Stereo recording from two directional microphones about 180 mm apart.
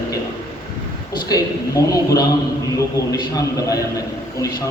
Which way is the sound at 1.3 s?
20° left (ahead or behind).